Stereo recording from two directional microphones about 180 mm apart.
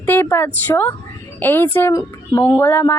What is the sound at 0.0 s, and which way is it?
A woman's voice, 10° left (ahead or behind).